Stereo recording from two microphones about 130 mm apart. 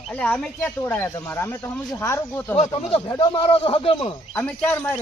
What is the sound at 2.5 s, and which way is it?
Speech, 50° left (ahead or behind).